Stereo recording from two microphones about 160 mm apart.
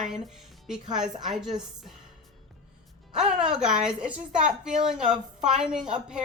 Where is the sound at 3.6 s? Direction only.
5° right (ahead or behind).